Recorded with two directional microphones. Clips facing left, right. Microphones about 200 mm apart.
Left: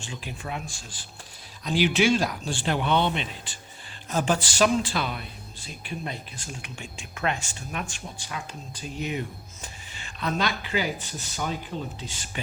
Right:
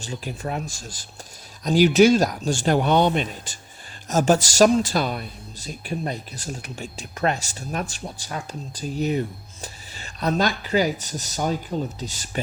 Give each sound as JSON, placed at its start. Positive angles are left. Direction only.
{"t": 0.0, "sound": "speech", "side_deg": -40}